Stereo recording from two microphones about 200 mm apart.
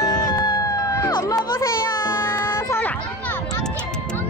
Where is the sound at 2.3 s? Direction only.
15° left (ahead or behind).